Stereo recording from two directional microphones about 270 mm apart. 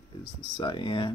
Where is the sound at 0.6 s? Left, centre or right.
Centre.